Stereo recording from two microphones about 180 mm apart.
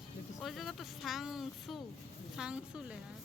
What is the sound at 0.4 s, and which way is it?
Speech, centre (ahead or behind).